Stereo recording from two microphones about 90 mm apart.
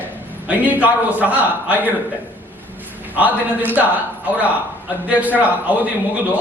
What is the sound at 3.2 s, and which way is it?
A man's voice, 20° right (ahead or behind).